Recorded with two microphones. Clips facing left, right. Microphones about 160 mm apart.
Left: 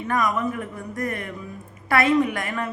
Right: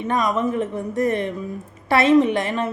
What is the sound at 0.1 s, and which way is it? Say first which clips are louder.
A woman's voice: right 3 dB; 25° right (ahead or behind).